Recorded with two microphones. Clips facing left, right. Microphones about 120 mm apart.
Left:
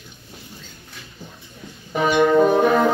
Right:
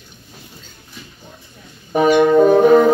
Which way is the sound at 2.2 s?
35° right (ahead or behind).